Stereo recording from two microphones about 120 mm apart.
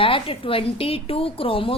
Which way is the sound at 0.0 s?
50° left (ahead or behind).